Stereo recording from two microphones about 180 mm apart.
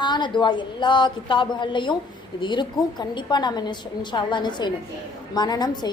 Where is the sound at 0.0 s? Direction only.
25° left (ahead or behind).